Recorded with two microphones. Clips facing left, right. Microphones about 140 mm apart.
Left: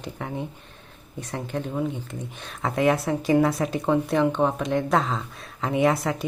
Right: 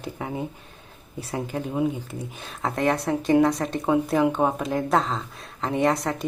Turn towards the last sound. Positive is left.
turn(degrees=0)  # may be behind; listen again after turning